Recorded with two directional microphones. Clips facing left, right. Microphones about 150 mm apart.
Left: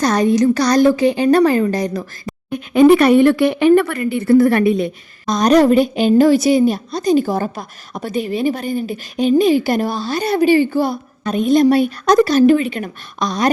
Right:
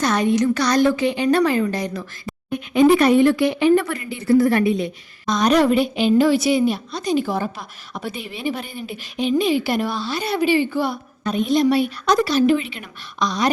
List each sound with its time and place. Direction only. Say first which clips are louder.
0.0 s a woman's voice: left 4 dB; 40° left (ahead or behind)
2.5 s speech: left 5 dB; 55° left (ahead or behind)
5.2 s a woman's voice: left 4 dB; 40° left (ahead or behind)